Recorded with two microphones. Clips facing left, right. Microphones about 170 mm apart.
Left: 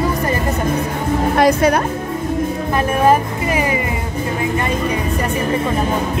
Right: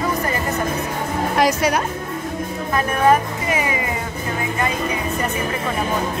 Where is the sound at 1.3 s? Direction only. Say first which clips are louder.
Left 4 dB; 55° left (ahead or behind).